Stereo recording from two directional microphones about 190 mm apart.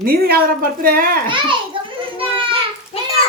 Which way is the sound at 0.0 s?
50° right (ahead or behind).